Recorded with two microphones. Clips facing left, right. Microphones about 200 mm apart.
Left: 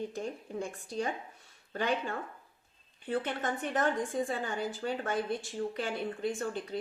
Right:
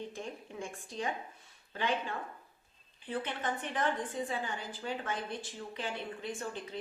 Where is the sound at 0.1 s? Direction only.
40° left (ahead or behind).